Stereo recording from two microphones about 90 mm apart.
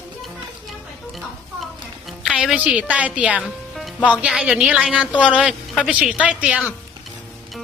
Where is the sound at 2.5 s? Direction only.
15° right (ahead or behind).